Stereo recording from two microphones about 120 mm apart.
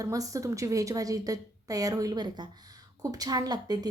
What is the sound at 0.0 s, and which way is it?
A woman's voice, 30° right (ahead or behind).